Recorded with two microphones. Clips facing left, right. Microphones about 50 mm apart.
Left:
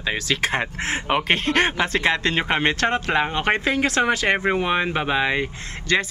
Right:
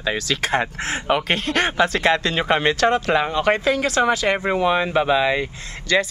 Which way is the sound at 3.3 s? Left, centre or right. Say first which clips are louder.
Right 2 dB; left.